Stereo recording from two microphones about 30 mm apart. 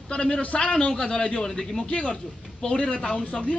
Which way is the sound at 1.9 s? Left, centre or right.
Left.